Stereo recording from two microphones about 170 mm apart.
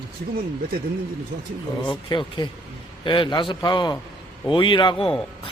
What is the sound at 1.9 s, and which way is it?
A man's voice, 30° left (ahead or behind).